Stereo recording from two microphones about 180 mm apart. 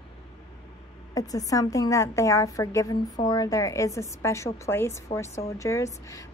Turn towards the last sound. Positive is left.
turn(degrees=15)  # may be behind; listen again after turning